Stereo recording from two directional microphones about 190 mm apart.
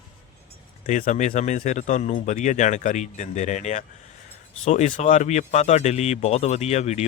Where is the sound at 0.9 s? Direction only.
40° left (ahead or behind).